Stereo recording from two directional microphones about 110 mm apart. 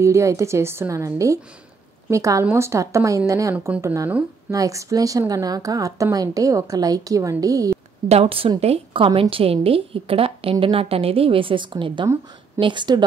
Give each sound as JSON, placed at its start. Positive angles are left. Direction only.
{"t": 0.0, "sound": "a woman's voice", "side_deg": -25}
{"t": 8.1, "sound": "a woman's voice", "side_deg": -60}